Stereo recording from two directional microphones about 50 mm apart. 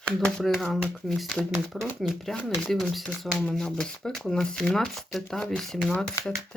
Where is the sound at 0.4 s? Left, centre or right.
Centre.